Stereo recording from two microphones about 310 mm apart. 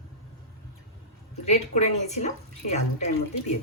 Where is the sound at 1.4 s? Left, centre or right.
Left.